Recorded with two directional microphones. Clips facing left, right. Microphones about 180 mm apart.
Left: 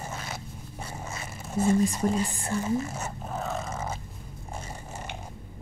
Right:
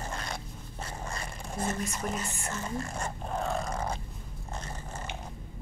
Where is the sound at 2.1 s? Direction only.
10° left (ahead or behind).